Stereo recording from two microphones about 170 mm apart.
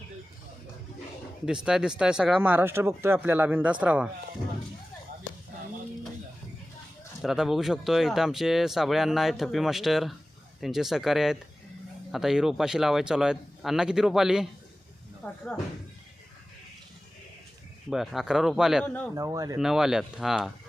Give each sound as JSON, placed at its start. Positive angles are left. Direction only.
{"t": 1.5, "sound": "speech", "side_deg": -5}
{"t": 7.2, "sound": "speech", "side_deg": 0}
{"t": 15.2, "sound": "speech", "side_deg": 15}
{"t": 17.8, "sound": "speech", "side_deg": 0}
{"t": 19.1, "sound": "speech", "side_deg": -20}
{"t": 19.5, "sound": "speech", "side_deg": 0}